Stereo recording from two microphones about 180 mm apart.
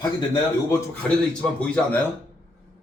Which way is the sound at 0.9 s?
5° left (ahead or behind).